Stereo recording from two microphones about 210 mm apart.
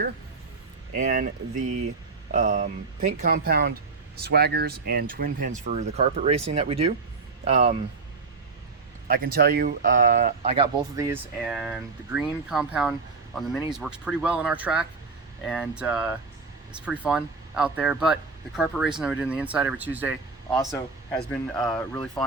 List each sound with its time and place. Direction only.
0.9 s speech: 40° right (ahead or behind)
9.0 s speech: 45° right (ahead or behind); by 10.7 s 30° right (ahead or behind)
10.9 s speech: 15° right (ahead or behind)
11.4 s speech: centre (ahead or behind)